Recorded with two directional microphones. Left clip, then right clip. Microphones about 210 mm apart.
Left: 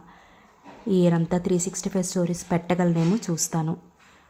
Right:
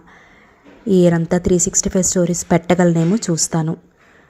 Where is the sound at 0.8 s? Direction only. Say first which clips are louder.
Right 8 dB; 15° right (ahead or behind).